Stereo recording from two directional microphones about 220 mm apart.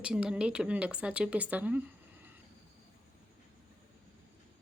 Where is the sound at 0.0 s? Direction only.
5° right (ahead or behind).